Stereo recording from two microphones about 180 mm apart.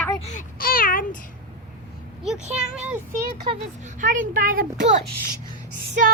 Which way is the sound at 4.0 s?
45° right (ahead or behind).